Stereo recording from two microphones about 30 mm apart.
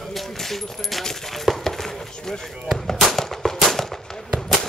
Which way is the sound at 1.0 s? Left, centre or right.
Centre.